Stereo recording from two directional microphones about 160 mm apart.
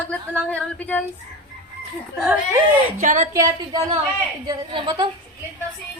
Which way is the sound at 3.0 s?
55° right (ahead or behind).